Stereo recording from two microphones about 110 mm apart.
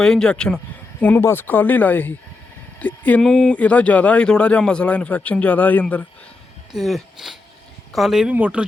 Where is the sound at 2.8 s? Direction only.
15° left (ahead or behind).